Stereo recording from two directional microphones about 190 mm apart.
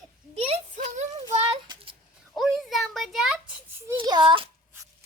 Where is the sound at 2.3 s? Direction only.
Centre (ahead or behind).